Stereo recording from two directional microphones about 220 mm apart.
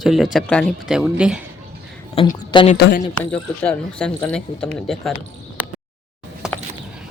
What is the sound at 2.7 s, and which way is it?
Speech, 45° left (ahead or behind).